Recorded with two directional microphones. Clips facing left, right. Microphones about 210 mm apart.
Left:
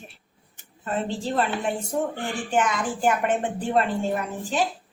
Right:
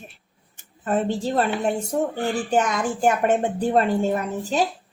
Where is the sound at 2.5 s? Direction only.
40° right (ahead or behind).